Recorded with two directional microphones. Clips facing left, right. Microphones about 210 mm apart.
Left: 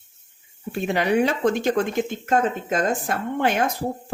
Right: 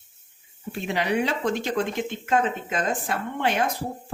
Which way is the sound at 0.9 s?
50° left (ahead or behind).